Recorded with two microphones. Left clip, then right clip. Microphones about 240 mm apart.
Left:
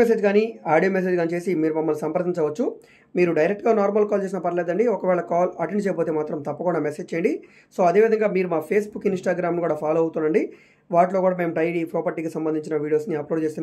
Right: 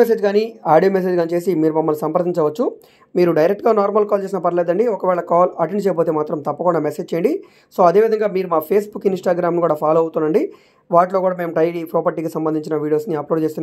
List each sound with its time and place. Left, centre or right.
0.0 s speech: right